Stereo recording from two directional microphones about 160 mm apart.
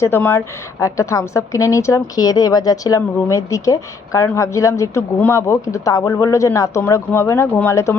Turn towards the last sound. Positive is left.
turn(degrees=15)  # may be behind; listen again after turning